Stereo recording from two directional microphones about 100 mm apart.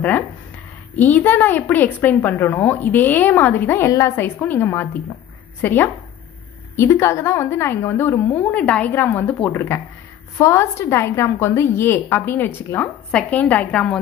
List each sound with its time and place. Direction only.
0.9 s a woman's voice: 15° left (ahead or behind)
4.4 s a woman's voice: 20° left (ahead or behind)